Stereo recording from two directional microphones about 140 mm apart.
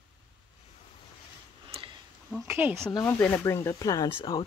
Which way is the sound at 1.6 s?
40° right (ahead or behind).